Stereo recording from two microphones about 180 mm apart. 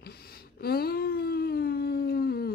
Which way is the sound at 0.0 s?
60° left (ahead or behind).